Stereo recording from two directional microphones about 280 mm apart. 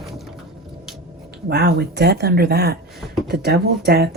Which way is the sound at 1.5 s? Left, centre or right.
Right.